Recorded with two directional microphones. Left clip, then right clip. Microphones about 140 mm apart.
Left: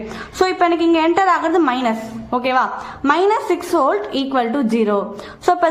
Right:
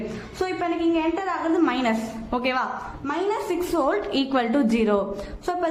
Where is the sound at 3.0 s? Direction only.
40° left (ahead or behind).